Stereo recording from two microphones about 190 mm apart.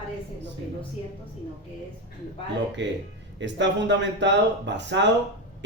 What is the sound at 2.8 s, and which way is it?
Speech, 70° right (ahead or behind).